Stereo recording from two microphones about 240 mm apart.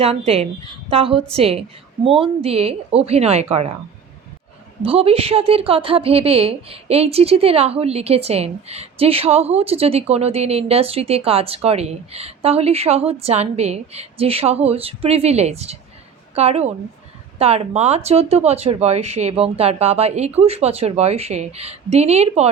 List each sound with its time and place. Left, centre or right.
0.0 s a woman's voice: right
4.8 s a woman's voice: right